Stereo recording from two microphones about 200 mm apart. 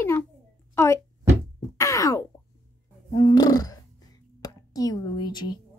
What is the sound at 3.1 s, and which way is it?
Burping, 20° left (ahead or behind).